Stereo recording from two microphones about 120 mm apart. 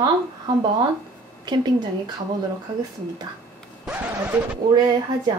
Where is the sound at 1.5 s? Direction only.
40° right (ahead or behind).